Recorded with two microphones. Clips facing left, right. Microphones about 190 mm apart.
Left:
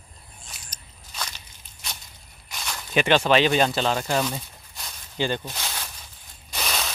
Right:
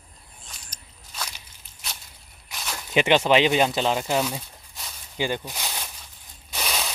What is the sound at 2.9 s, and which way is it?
Speech, 20° right (ahead or behind).